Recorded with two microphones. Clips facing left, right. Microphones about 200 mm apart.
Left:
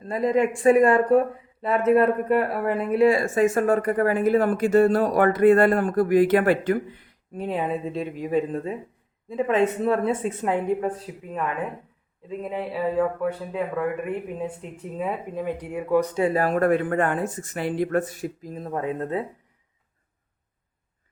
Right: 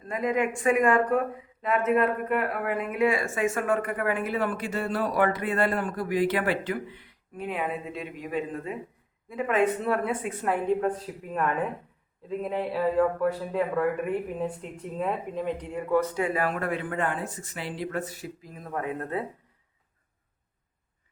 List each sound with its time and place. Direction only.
0.0 s speech: 35° left (ahead or behind)
10.4 s speech: 15° left (ahead or behind)
16.2 s speech: 35° left (ahead or behind)
18.5 s speech: 25° left (ahead or behind)